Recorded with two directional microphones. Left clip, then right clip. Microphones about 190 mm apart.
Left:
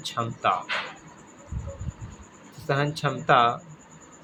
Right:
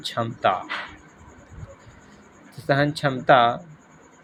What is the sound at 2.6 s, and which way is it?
Speech, 25° right (ahead or behind).